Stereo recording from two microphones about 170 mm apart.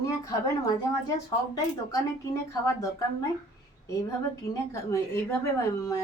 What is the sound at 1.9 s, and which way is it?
A woman's voice, 20° left (ahead or behind).